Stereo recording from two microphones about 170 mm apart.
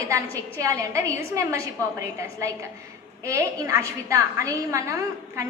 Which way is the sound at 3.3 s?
15° right (ahead or behind).